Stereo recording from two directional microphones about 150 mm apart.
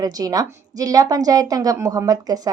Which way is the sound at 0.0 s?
25° right (ahead or behind).